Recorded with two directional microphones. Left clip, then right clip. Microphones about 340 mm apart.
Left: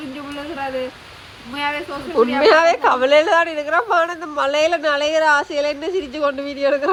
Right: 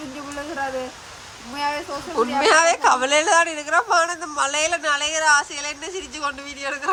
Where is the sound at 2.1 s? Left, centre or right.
Centre.